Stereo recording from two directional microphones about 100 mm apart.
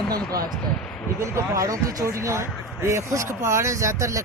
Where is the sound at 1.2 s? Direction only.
35° right (ahead or behind).